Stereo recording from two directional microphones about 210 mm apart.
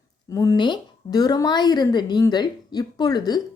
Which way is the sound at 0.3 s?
15° left (ahead or behind).